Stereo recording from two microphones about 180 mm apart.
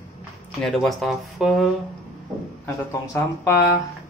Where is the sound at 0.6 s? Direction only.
Centre (ahead or behind).